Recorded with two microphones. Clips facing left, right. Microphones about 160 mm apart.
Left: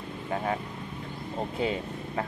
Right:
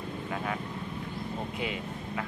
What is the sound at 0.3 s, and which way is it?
Speech, 35° left (ahead or behind).